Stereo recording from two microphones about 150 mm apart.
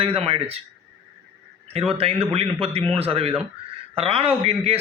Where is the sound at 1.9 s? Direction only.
40° right (ahead or behind).